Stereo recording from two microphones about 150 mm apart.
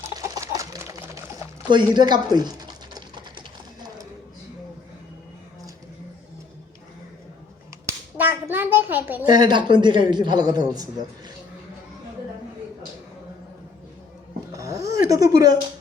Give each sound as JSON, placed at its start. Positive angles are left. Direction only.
{"t": 0.2, "sound": "chicken", "side_deg": -20}
{"t": 1.7, "sound": "typing", "side_deg": -30}
{"t": 7.9, "sound": "a sound", "side_deg": -15}
{"t": 9.2, "sound": "a woman's voice", "side_deg": -25}
{"t": 14.5, "sound": "a sound", "side_deg": -20}
{"t": 15.1, "sound": "speech", "side_deg": -25}